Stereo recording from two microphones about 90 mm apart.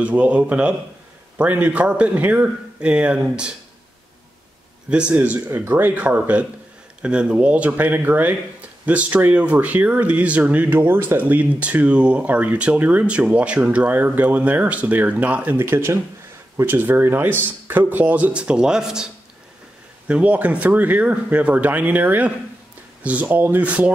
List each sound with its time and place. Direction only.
0.0 s speech: 15° right (ahead or behind)
4.8 s speech: 10° right (ahead or behind)
15.6 s speech: 30° right (ahead or behind); by 19.0 s 10° right (ahead or behind)
20.1 s speech: 15° right (ahead or behind)